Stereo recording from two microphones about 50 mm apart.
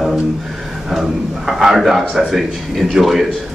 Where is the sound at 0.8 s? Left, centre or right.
Centre.